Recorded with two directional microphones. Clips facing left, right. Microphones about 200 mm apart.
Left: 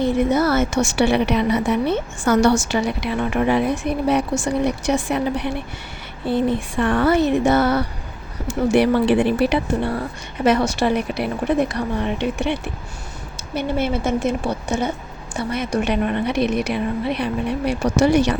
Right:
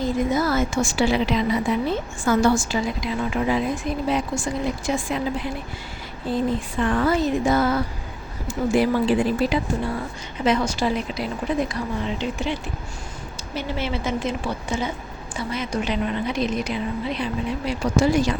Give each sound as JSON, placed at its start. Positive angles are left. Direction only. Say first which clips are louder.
{"t": 0.0, "sound": "a woman's voice", "louder": "left 4 dB", "side_deg": 70}
{"t": 13.7, "sound": "speech", "louder": "left 6 dB", "side_deg": 50}
{"t": 15.4, "sound": "speech", "louder": "left 4 dB", "side_deg": 65}